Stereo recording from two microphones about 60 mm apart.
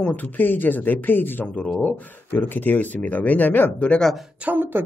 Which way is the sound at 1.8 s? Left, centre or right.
Left.